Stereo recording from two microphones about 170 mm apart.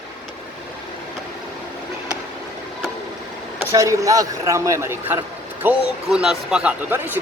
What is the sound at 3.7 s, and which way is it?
A man's voice, 20° right (ahead or behind).